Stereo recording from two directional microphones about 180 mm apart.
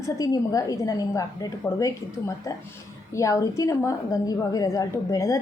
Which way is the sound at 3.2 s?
20° left (ahead or behind).